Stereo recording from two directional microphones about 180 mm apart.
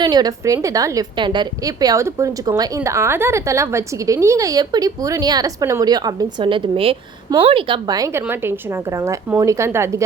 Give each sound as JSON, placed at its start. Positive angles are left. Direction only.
{"t": 0.0, "sound": "a woman's voice", "side_deg": -20}